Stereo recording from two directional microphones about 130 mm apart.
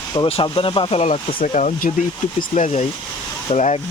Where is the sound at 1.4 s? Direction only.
80° left.